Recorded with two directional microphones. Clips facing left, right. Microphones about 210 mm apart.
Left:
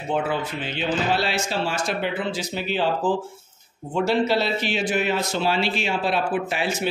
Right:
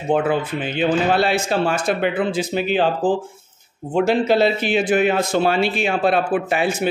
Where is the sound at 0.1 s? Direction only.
55° right (ahead or behind).